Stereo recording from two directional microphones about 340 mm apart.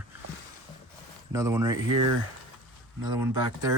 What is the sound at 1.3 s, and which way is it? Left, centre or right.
Speech, centre.